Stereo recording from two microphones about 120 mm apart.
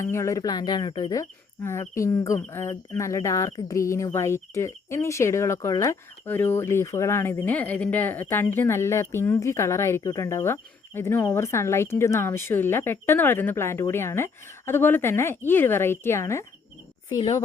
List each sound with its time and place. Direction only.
0.0 s speech: 25° left (ahead or behind); by 1.1 s 40° left (ahead or behind)
1.1 s speech: 25° left (ahead or behind)